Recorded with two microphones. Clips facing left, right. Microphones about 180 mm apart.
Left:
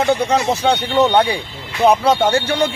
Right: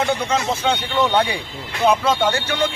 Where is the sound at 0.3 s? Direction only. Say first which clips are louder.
Left 4 dB; 40° left (ahead or behind).